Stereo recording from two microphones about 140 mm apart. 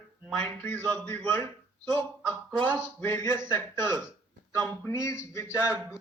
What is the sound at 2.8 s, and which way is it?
Speech, 15° left (ahead or behind).